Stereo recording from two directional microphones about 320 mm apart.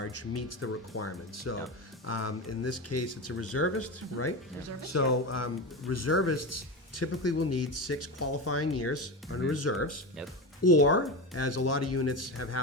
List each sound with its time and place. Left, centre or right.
0.0 s speech: left